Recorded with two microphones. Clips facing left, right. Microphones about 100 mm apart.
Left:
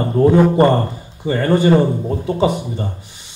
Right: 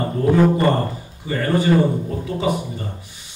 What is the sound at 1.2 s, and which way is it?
Speech, 30° left (ahead or behind).